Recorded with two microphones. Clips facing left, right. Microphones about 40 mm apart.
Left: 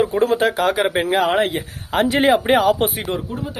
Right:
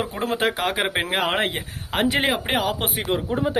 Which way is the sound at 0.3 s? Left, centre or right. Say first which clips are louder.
Left 5 dB; centre.